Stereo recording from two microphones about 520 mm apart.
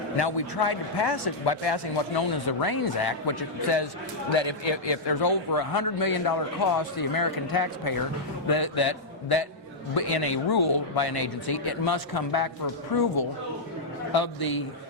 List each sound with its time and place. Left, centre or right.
0.2 s a man's voice: left
14.1 s a man's voice: left